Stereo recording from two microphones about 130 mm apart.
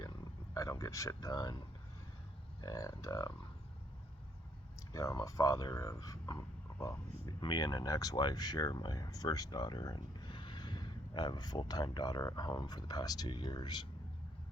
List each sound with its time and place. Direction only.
0.5 s speech: 25° left (ahead or behind)
2.6 s speech: 25° left (ahead or behind)
4.8 s a sound: 25° left (ahead or behind)
5.2 s speech: 25° left (ahead or behind)
7.3 s speech: 35° left (ahead or behind)